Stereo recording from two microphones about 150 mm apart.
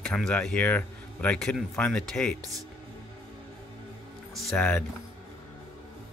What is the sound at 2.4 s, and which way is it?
Speech, 20° right (ahead or behind).